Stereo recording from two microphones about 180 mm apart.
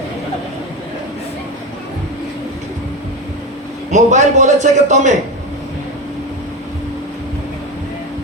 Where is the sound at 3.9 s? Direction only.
40° right (ahead or behind).